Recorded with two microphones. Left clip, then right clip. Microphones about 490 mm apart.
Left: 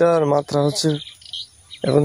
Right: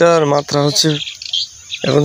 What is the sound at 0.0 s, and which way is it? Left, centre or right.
Speech, left.